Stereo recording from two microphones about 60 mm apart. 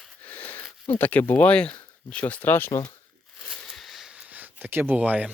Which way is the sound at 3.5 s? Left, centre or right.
Centre.